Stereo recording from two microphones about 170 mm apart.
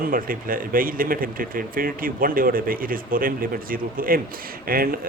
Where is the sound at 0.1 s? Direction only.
55° right (ahead or behind).